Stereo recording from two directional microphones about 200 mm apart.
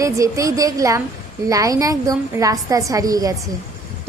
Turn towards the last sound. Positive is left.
turn(degrees=-15)  # may be behind; listen again after turning